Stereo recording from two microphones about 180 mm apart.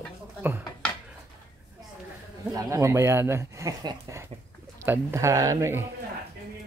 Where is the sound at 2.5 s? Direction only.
15° right (ahead or behind).